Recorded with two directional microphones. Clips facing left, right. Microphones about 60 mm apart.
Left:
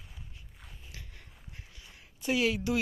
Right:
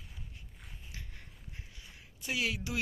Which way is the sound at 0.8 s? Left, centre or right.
Right.